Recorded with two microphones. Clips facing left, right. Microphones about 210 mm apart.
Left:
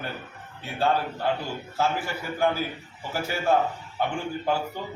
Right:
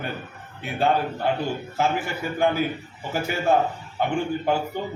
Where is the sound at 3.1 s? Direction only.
20° right (ahead or behind).